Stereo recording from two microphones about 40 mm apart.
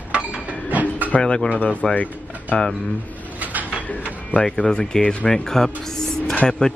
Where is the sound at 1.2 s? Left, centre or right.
Left.